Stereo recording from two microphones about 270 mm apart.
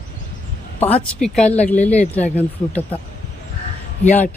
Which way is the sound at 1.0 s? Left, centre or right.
Centre.